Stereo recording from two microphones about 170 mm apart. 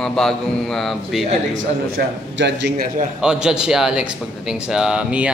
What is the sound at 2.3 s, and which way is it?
Speech, 85° right.